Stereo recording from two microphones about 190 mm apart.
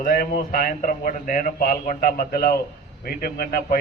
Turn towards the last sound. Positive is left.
turn(degrees=50)  # may be behind; listen again after turning